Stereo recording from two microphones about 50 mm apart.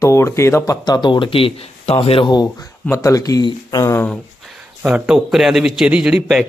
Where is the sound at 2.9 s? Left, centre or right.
Left.